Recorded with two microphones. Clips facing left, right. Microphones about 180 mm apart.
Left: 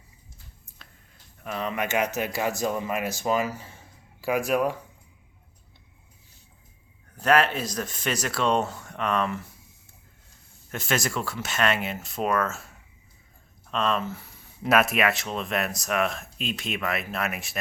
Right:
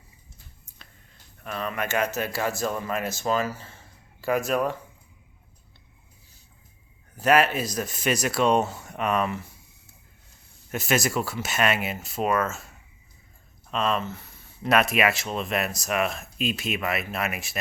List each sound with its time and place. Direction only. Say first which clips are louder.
1.5 s speech: left 1 dB; 15° left (ahead or behind)
7.2 s speech: right 1 dB; 10° right (ahead or behind)
10.7 s speech: right 3 dB; 10° right (ahead or behind)
13.7 s speech: even; centre (ahead or behind)
14.1 s speech: left 1 dB; 10° left (ahead or behind)